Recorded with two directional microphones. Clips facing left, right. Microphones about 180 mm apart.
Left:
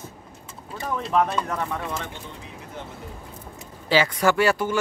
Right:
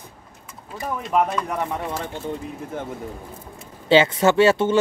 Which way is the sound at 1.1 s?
10° right (ahead or behind).